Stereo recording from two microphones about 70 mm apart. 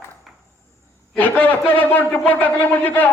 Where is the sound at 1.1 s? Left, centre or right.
Left.